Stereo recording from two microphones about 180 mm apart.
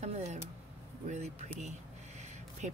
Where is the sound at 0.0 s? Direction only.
40° right (ahead or behind).